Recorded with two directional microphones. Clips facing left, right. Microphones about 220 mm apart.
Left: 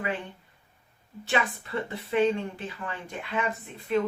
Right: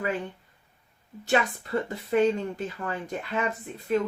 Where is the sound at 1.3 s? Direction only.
40° right (ahead or behind).